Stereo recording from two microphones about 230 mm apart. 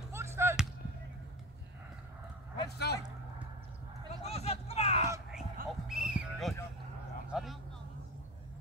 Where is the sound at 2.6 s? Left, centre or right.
Left.